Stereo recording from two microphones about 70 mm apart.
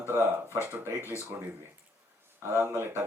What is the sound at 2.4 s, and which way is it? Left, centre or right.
Speech, right.